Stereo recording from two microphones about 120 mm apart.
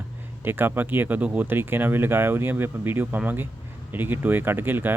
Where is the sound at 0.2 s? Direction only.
15° right (ahead or behind).